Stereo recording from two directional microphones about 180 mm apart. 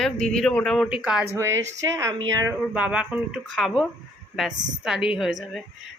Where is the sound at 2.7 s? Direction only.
5° right (ahead or behind).